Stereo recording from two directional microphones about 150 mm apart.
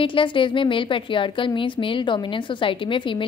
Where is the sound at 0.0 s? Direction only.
35° left (ahead or behind).